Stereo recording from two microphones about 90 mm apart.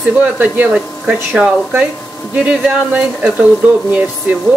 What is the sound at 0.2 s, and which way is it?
Speech, 15° right (ahead or behind).